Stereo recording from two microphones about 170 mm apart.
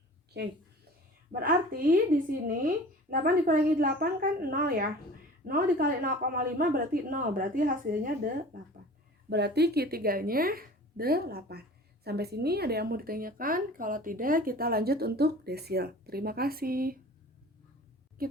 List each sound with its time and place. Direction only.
1.3 s speech: 60° right (ahead or behind)
9.3 s speech: 75° right (ahead or behind); by 17.0 s 60° right (ahead or behind)
18.2 s a woman's voice: 60° right (ahead or behind)